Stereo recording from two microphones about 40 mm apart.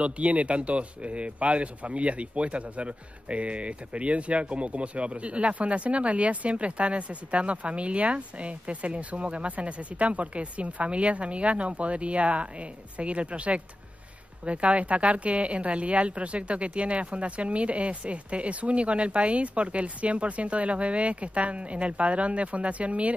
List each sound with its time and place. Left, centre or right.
0.0 s speech: right